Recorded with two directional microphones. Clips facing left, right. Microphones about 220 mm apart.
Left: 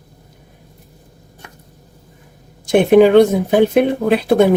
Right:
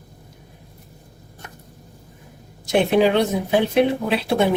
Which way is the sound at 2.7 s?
50° left (ahead or behind).